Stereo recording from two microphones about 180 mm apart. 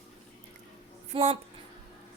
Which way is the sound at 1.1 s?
35° right (ahead or behind).